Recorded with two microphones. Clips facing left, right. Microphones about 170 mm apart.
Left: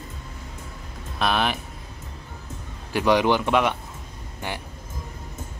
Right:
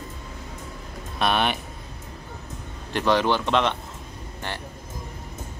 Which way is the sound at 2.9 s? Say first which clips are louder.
Left 2 dB; 10° left (ahead or behind).